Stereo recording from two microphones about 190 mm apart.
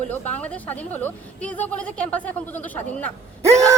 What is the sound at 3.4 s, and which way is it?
Groan, 15° right (ahead or behind).